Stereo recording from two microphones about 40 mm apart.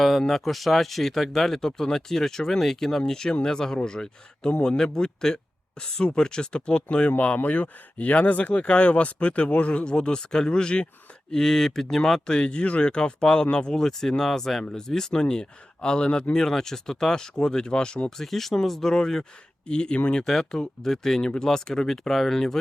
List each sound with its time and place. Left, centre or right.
0.0 s speech: centre; by 9.8 s left
9.8 s speech: left
11.3 s speech: centre
12.2 s speech: left
18.2 s speech: centre; by 20.0 s left
20.2 s speech: centre